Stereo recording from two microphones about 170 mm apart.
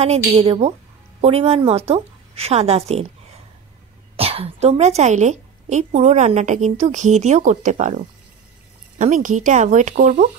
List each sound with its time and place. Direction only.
0.0 s a woman's voice: 40° right (ahead or behind)
4.2 s a woman's voice: 35° right (ahead or behind)
8.9 s a woman's voice: 50° right (ahead or behind)